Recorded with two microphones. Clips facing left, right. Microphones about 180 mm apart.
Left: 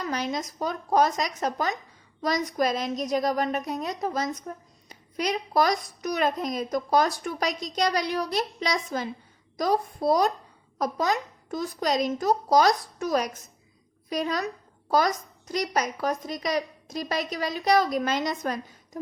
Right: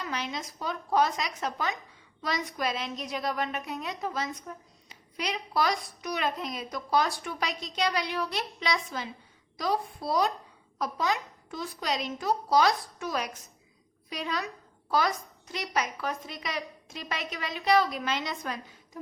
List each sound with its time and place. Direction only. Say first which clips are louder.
0.0 s a child's voice: left 6 dB; 40° left (ahead or behind)